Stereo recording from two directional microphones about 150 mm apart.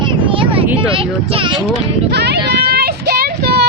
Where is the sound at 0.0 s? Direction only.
35° right (ahead or behind).